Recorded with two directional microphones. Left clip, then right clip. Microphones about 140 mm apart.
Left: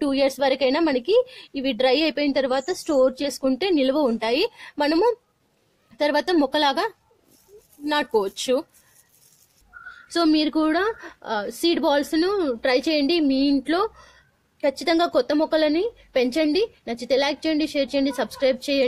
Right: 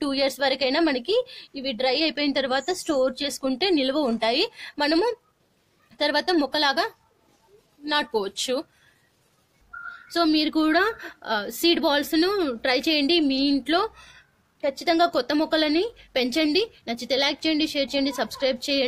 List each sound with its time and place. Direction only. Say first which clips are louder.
0.0 s a woman's voice: left 3 dB; 30° left (ahead or behind)
10.0 s a woman's voice: left 2 dB; 40° left (ahead or behind)